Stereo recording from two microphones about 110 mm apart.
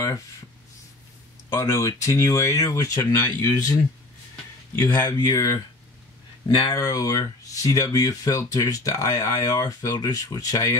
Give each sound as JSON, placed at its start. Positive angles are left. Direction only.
{"t": 1.5, "sound": "speech", "side_deg": 25}
{"t": 4.8, "sound": "speech", "side_deg": 20}
{"t": 5.2, "sound": "speech", "side_deg": 35}
{"t": 6.7, "sound": "speech", "side_deg": 30}